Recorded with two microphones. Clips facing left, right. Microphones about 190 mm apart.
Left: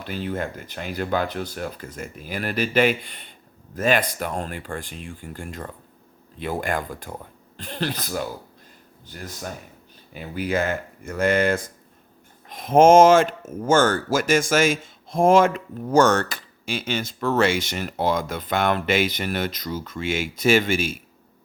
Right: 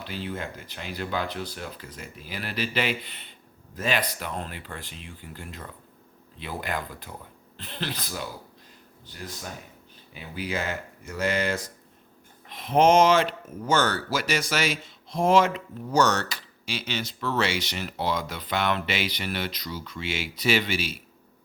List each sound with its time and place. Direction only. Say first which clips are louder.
0.0 s speech: left 6 dB; 50° left (ahead or behind)
10.2 s speech: left 7 dB; 50° left (ahead or behind)